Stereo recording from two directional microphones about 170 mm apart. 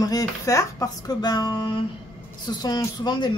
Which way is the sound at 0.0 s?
20° left (ahead or behind).